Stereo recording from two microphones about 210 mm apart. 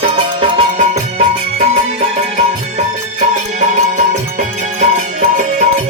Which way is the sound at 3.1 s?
35° right (ahead or behind).